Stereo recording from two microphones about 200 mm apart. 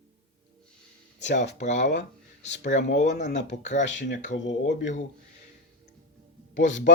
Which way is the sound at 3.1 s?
35° left (ahead or behind).